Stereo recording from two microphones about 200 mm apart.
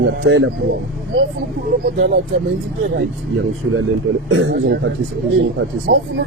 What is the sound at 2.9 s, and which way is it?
A man's voice, 65° right (ahead or behind).